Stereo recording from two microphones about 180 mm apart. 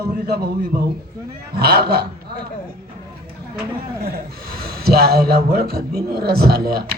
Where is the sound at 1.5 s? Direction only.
60° right (ahead or behind).